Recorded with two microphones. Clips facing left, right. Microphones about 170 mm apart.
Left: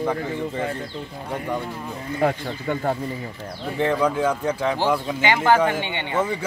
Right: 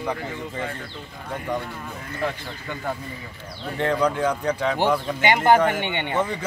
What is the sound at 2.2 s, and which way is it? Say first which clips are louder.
Speech: left 6 dB; 50° left (ahead or behind).